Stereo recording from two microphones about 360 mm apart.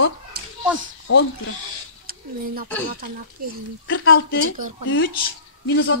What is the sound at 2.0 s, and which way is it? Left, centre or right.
Speech, right.